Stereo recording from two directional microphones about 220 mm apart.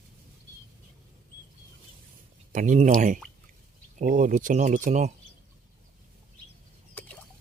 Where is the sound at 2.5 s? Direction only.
35° right (ahead or behind).